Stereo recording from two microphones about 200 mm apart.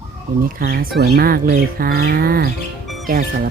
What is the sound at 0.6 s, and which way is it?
Speech, 45° right (ahead or behind).